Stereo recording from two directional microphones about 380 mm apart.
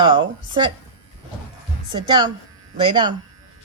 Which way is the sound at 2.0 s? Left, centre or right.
Centre.